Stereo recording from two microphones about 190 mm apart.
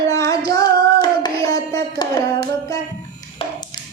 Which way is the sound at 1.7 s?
20° left (ahead or behind).